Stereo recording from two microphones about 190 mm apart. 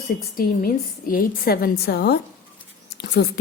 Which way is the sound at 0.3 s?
50° left (ahead or behind).